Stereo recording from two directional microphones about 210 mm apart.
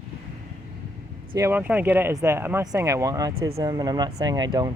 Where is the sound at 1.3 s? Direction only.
10° right (ahead or behind).